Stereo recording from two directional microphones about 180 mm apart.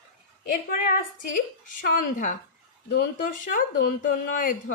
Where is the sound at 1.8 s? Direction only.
50° left (ahead or behind).